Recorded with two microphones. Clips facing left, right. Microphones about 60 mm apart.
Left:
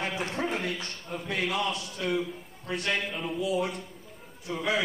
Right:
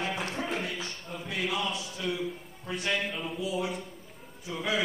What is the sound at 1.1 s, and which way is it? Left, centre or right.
Speech, left.